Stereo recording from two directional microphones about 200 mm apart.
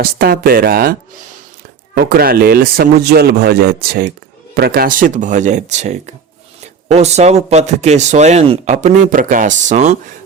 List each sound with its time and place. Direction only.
0.0 s speech: 45° right (ahead or behind)
2.0 s a man's voice: 50° right (ahead or behind)